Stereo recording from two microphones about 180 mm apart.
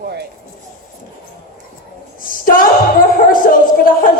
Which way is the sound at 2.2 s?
50° left (ahead or behind).